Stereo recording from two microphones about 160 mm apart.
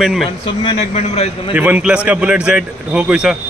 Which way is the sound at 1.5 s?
10° right (ahead or behind).